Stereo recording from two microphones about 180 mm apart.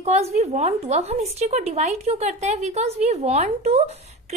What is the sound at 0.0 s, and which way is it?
A woman's voice, 35° right (ahead or behind).